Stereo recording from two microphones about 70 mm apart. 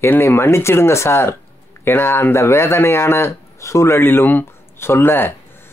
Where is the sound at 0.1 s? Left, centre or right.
Left.